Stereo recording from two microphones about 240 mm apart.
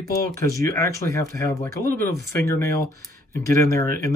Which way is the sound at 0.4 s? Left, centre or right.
Centre.